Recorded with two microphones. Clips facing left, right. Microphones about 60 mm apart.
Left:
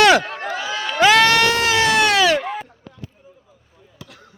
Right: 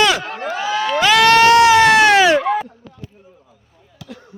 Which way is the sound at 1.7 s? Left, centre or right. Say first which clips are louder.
Right 6 dB; right.